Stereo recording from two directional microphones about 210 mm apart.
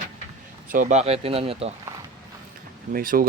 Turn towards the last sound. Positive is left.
turn(degrees=-45)  # may be behind; listen again after turning